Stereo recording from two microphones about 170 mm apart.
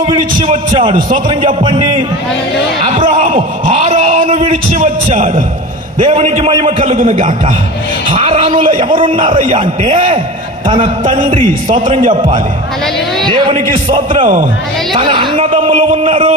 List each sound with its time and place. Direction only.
0.4 s speech: 35° right (ahead or behind)
2.8 s a man's voice: 35° right (ahead or behind)
12.0 s a man's voice: 50° right (ahead or behind)
13.2 s a sound: 25° right (ahead or behind)
13.9 s a man's voice: 30° right (ahead or behind)